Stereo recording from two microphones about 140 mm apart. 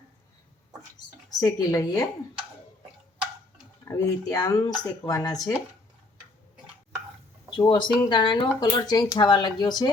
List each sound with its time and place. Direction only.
0.9 s speech: 25° left (ahead or behind)
3.8 s speech: 20° left (ahead or behind)
7.6 s speech: 35° left (ahead or behind)